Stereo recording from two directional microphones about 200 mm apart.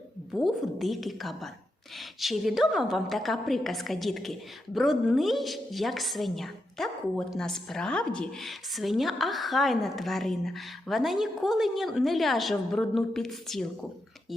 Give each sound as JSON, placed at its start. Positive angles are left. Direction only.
{"t": 0.3, "sound": "a woman's voice", "side_deg": 0}